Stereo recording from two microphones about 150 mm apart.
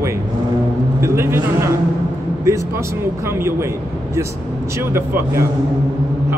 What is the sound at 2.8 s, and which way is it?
Speech, 15° right (ahead or behind).